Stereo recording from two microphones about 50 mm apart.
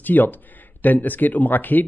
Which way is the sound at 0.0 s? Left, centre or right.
Left.